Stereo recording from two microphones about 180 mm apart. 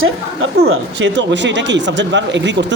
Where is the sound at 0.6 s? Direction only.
75° right (ahead or behind).